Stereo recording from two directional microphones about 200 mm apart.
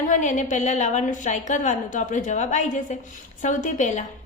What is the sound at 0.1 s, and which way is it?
A woman's voice, 40° left (ahead or behind).